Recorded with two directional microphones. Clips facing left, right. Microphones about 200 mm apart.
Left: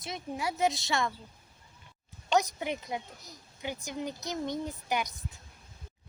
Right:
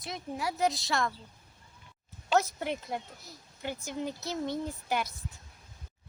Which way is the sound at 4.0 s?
15° left (ahead or behind).